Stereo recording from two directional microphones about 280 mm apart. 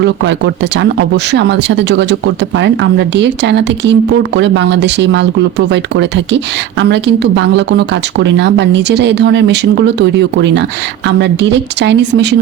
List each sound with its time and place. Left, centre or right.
0.0 s a woman's voice: right